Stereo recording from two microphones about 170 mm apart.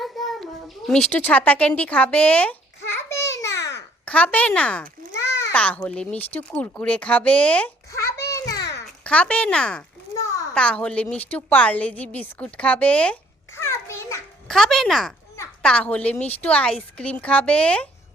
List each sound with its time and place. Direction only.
0.0 s a sound: centre (ahead or behind)
0.9 s a woman's voice: 5° left (ahead or behind)
7.9 s a sound: 15° left (ahead or behind)
8.7 s a child's voice: 5° left (ahead or behind)
13.6 s children playing: 15° left (ahead or behind)
14.4 s a woman's voice: centre (ahead or behind)